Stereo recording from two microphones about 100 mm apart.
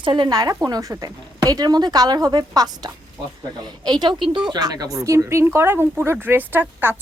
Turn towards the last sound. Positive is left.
turn(degrees=-20)  # may be behind; listen again after turning